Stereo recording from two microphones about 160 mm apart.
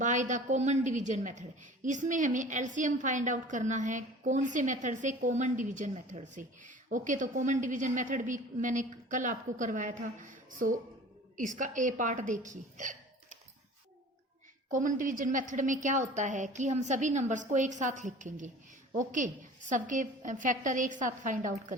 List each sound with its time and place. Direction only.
0.0 s a woman's voice: 50° right (ahead or behind)
14.7 s a woman's voice: 55° right (ahead or behind)